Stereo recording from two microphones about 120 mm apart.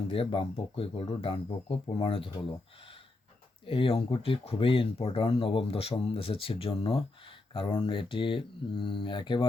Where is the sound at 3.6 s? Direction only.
50° left (ahead or behind).